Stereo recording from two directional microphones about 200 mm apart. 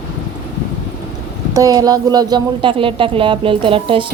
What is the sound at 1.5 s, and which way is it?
A woman's voice, 20° right (ahead or behind).